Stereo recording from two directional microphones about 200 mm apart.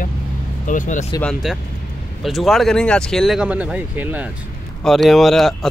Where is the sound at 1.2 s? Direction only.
Centre (ahead or behind).